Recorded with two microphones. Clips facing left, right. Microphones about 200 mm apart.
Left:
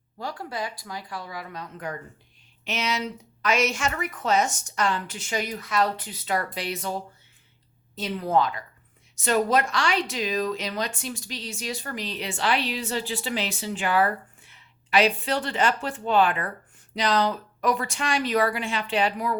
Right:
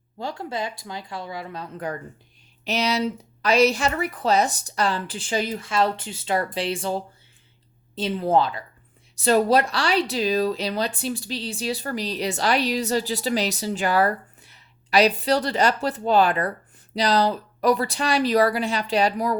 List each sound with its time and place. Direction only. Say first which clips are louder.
0.2 s speech: right 3 dB; 25° right (ahead or behind)